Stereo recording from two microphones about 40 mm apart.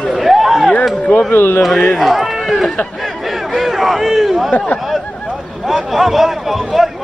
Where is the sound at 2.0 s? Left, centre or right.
Centre.